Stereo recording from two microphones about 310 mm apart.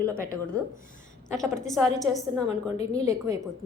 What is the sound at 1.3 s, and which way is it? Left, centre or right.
A woman's voice, centre.